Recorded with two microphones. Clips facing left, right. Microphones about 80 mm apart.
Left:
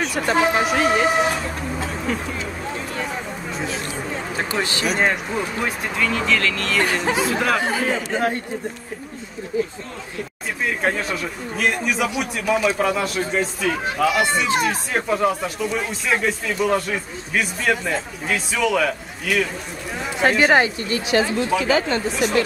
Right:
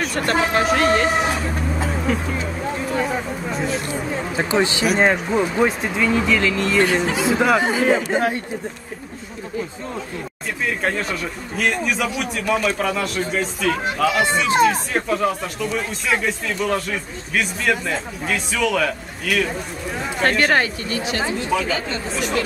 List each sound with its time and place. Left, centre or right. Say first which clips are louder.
0.0 s speech: left 1 dB; centre
3.5 s speech: right 4 dB; centre
4.5 s speech: right 8 dB; right
4.8 s speech: right 2 dB; centre
5.3 s speech: right 6 dB; centre
10.6 s speech: even; centre